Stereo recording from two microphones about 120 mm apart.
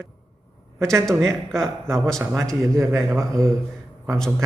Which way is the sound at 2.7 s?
25° right (ahead or behind).